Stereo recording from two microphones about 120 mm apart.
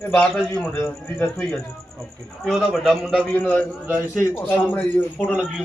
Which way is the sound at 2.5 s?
Centre (ahead or behind).